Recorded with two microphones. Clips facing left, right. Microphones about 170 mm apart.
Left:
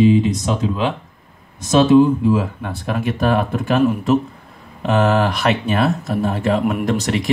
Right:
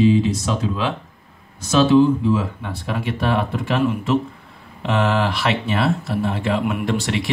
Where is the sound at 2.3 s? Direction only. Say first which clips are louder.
Left 3 dB; 55° left (ahead or behind).